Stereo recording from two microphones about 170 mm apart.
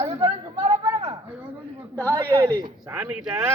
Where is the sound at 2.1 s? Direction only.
25° right (ahead or behind).